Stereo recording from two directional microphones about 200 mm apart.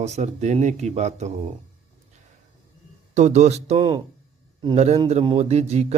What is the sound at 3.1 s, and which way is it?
Speech, 35° right (ahead or behind).